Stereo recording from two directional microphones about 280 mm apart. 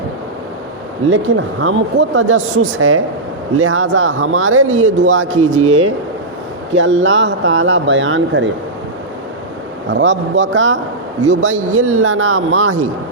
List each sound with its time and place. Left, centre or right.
1.6 s speech: right
9.9 s speech: right